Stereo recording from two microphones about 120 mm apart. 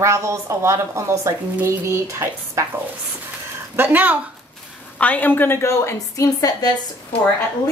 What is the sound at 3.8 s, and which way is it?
Speech, 15° right (ahead or behind).